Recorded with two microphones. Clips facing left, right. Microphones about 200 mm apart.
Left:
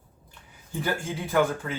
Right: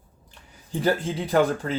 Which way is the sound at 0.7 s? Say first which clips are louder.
Right 6 dB; 35° right (ahead or behind).